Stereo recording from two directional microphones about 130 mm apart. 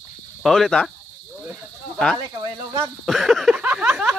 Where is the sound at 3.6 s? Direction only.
10° right (ahead or behind).